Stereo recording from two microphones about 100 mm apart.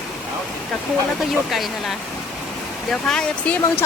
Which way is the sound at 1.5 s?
Centre (ahead or behind).